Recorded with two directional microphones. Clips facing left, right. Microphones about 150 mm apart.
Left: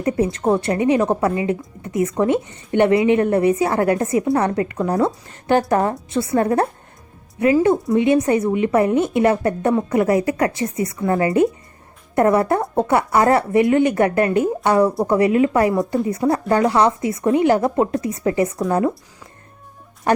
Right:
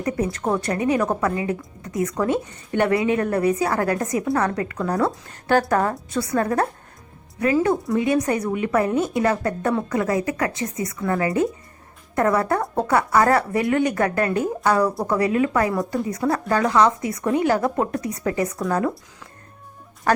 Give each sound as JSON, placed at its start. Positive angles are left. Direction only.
{"t": 0.0, "sound": "a woman's voice", "side_deg": 30}
{"t": 20.1, "sound": "music", "side_deg": 20}